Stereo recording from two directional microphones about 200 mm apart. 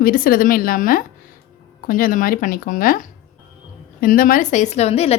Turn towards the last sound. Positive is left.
turn(degrees=30)  # may be behind; listen again after turning